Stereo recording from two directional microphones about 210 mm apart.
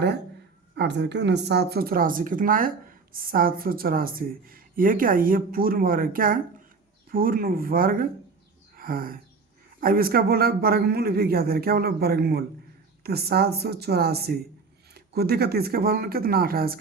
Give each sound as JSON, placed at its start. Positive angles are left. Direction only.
{"t": 0.8, "sound": "speech", "side_deg": -55}
{"t": 8.7, "sound": "a sound", "side_deg": -45}
{"t": 9.8, "sound": "speech", "side_deg": -45}